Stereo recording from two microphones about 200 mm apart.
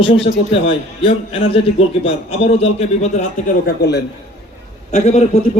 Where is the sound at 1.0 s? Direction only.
30° left (ahead or behind).